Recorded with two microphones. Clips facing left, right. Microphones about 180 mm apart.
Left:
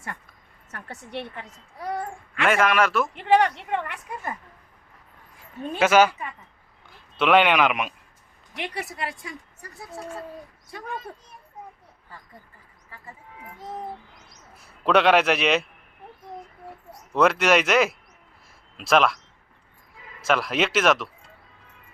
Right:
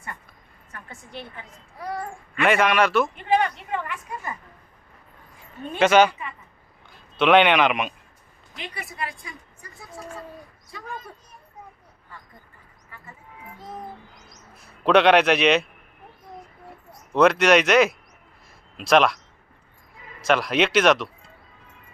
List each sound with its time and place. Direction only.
0.7 s a woman's voice: 70° left (ahead or behind)
2.4 s speech: centre (ahead or behind)
3.2 s a woman's voice: 75° left (ahead or behind)
5.8 s speech: 5° left (ahead or behind)
7.2 s speech: 5° left (ahead or behind)
8.5 s a woman's voice: 75° left (ahead or behind)
14.8 s speech: centre (ahead or behind)
17.2 s speech: 5° left (ahead or behind)
20.2 s speech: centre (ahead or behind)